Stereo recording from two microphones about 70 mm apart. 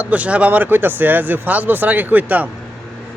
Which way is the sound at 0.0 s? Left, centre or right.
Right.